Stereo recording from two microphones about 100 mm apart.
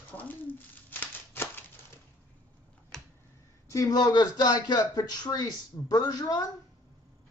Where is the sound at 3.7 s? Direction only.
35° left (ahead or behind).